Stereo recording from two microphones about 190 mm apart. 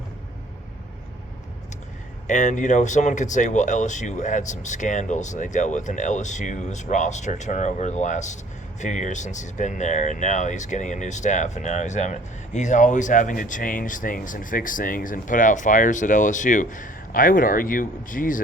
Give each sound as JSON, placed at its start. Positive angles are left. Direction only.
{"t": 2.2, "sound": "speech", "side_deg": 40}